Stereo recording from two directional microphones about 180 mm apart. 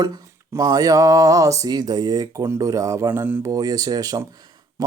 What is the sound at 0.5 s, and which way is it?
Speech, 20° right (ahead or behind).